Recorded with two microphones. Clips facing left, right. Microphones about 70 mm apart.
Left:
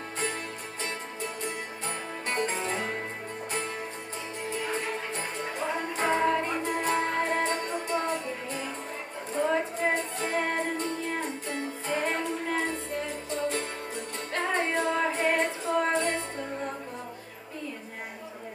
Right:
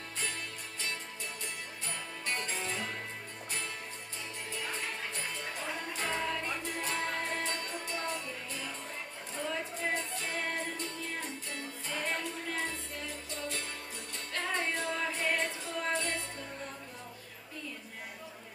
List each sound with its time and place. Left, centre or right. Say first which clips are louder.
0.8 s music: left 6 dB; left
4.6 s music: left 5 dB; left